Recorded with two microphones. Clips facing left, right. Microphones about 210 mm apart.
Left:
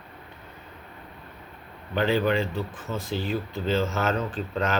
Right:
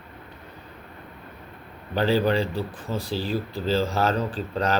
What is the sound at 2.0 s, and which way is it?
Speech, 35° right (ahead or behind).